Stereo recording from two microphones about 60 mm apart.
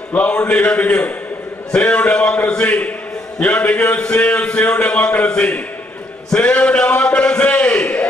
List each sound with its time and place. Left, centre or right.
0.1 s a man's voice: left